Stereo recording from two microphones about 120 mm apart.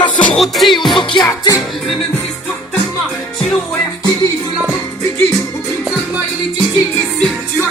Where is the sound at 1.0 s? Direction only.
40° left (ahead or behind).